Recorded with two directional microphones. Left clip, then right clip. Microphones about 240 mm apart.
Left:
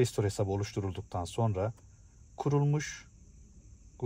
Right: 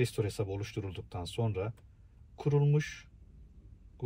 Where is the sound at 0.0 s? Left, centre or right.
Left.